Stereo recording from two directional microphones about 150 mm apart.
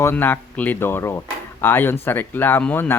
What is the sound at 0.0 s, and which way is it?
Speech, 15° left (ahead or behind).